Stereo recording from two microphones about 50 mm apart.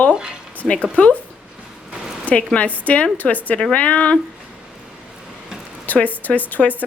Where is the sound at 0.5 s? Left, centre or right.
Left.